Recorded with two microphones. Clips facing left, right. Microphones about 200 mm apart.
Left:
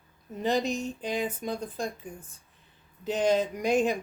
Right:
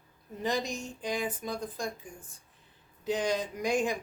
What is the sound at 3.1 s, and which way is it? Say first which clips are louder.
Speech: left 6 dB; 20° left (ahead or behind).